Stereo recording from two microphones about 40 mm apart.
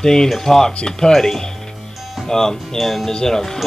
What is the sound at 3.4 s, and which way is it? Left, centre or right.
Speech, centre.